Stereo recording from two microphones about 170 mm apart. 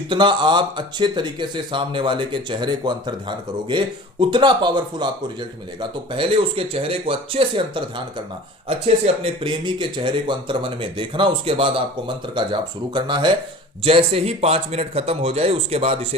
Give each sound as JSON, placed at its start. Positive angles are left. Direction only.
{"t": 0.1, "sound": "speech", "side_deg": -30}
{"t": 9.2, "sound": "a man's voice", "side_deg": -30}